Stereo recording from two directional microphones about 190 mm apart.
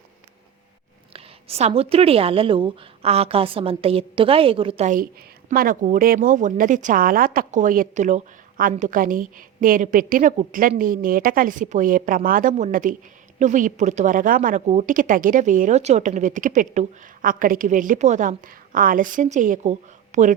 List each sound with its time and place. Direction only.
1.1 s a woman's voice: 35° right (ahead or behind)